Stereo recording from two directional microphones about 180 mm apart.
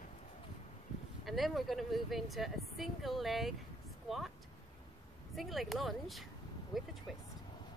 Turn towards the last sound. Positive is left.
turn(degrees=0)  # may be behind; listen again after turning